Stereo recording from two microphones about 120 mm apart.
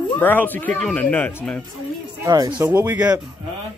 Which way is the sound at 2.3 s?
35° right (ahead or behind).